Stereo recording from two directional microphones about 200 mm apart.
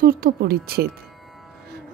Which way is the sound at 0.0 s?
50° right (ahead or behind).